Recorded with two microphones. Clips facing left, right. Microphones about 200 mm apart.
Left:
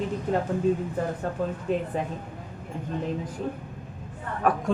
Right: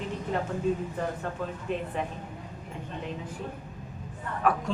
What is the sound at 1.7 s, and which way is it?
Speech, 40° left (ahead or behind).